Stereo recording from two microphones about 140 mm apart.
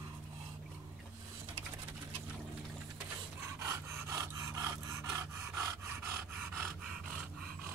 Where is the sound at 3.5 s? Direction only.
20° right (ahead or behind).